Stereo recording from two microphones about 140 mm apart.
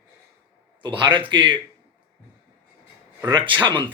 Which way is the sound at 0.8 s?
35° right (ahead or behind).